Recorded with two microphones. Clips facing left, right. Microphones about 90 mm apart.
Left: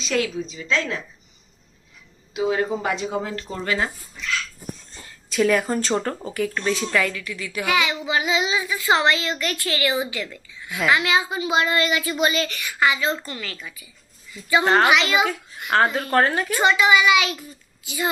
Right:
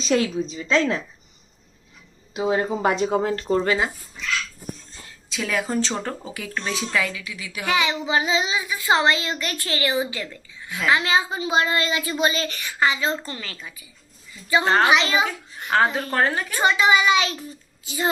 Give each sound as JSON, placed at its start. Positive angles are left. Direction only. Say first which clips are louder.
{"t": 0.0, "sound": "a woman's voice", "louder": "right 3 dB", "side_deg": -30}
{"t": 2.3, "sound": "a woman's voice", "louder": "even", "side_deg": -30}
{"t": 2.9, "sound": "a woman's voice", "louder": "right 4 dB", "side_deg": -40}
{"t": 5.0, "sound": "speech", "louder": "left 9 dB", "side_deg": 0}
{"t": 7.6, "sound": "a child's voice", "louder": "even", "side_deg": -25}
{"t": 14.6, "sound": "a child's voice", "louder": "left 2 dB", "side_deg": 20}
{"t": 14.8, "sound": "a child's voice", "louder": "even", "side_deg": -30}
{"t": 15.7, "sound": "speech", "louder": "left 2 dB", "side_deg": 0}
{"t": 16.6, "sound": "a woman's voice", "louder": "left 1 dB", "side_deg": -30}